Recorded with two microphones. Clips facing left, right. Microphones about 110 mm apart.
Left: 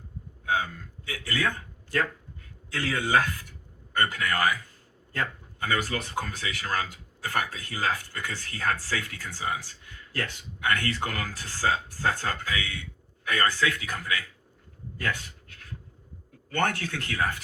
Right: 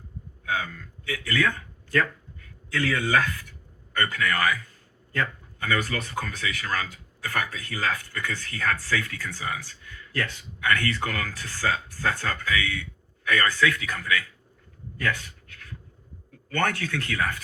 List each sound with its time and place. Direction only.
0.4 s a man's voice: 30° left (ahead or behind)
14.9 s a sound: 35° left (ahead or behind)
16.5 s speech: 30° left (ahead or behind)